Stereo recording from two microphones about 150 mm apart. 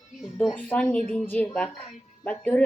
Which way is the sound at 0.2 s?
Centre (ahead or behind).